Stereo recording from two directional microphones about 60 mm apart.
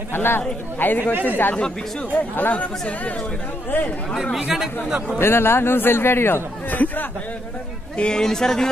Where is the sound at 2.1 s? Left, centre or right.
Left.